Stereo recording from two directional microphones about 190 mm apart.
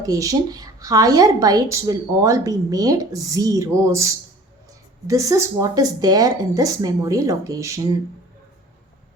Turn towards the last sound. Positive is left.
turn(degrees=-15)  # may be behind; listen again after turning